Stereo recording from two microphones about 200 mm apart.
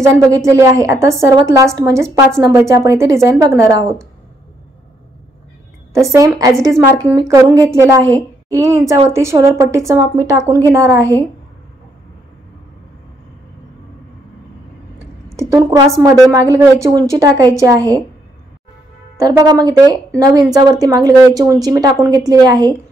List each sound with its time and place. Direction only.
0.0 s a woman's voice: 15° right (ahead or behind)
5.9 s a woman's voice: 15° right (ahead or behind)
15.3 s a woman's voice: 15° right (ahead or behind)
19.1 s a woman's voice: 20° right (ahead or behind)